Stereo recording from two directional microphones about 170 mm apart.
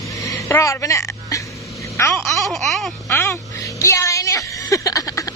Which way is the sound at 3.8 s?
20° left (ahead or behind).